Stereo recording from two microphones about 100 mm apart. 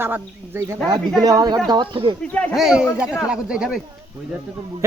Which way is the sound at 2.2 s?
10° left (ahead or behind).